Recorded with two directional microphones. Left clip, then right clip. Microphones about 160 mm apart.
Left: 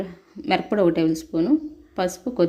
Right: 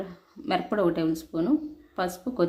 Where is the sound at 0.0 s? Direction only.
20° left (ahead or behind).